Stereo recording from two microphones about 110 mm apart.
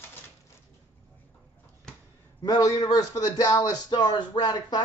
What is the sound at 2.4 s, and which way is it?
A man's voice, 35° left (ahead or behind).